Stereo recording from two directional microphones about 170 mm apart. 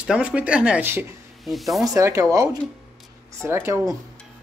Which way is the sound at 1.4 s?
Centre (ahead or behind).